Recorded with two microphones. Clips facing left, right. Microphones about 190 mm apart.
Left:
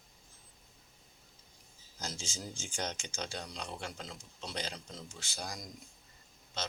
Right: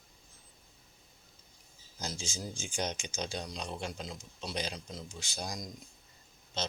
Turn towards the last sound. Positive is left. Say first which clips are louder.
# right 3 dB
turn(degrees=-20)  # may be behind; listen again after turning